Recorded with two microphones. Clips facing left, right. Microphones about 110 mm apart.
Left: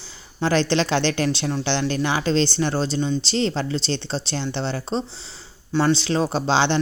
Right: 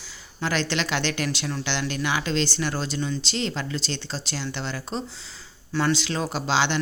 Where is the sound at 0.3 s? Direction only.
30° left (ahead or behind).